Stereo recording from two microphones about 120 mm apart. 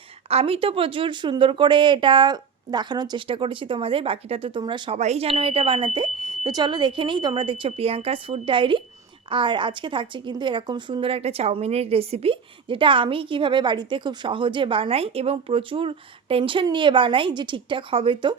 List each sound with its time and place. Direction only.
0.3 s speech: 55° right (ahead or behind)
4.9 s speech: 65° right (ahead or behind)
5.4 s speech: 50° right (ahead or behind)